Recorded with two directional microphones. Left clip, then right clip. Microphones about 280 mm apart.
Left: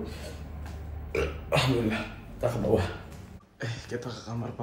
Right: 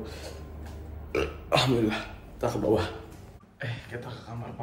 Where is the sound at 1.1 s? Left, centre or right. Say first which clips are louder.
Right 2 dB; centre.